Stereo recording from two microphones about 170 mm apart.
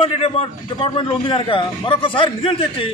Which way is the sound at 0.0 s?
35° left (ahead or behind).